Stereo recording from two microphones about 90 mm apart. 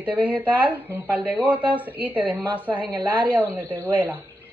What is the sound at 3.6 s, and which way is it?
Speech, 20° left (ahead or behind).